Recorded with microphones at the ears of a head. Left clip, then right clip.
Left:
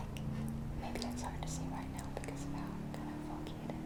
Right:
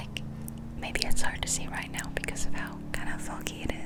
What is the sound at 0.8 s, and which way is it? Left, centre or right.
Speech, right.